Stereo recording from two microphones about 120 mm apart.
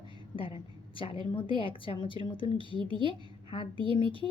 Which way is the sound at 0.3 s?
45° left (ahead or behind).